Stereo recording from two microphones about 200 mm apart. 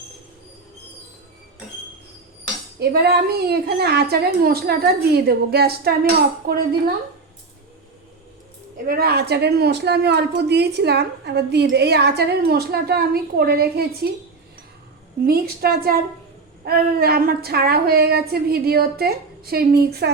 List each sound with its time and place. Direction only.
2.7 s a woman's voice: 50° right (ahead or behind)
8.9 s a woman's voice: 50° right (ahead or behind)
15.2 s a woman's voice: 50° right (ahead or behind)